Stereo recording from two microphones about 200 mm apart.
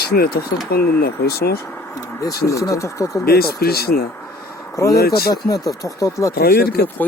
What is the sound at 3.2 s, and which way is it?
Speech, 50° left (ahead or behind).